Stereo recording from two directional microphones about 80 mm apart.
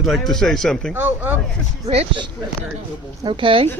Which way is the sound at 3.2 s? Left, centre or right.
Right.